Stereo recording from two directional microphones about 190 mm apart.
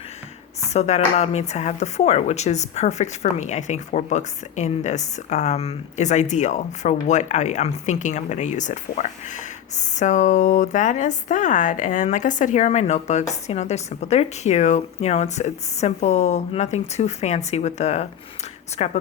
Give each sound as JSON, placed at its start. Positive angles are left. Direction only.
{"t": 0.7, "sound": "speech", "side_deg": 35}